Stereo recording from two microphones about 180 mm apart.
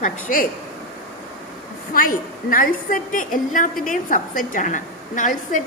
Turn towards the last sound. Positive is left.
turn(degrees=45)  # may be behind; listen again after turning